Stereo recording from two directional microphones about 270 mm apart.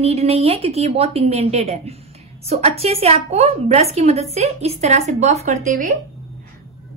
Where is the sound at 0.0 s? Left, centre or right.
Right.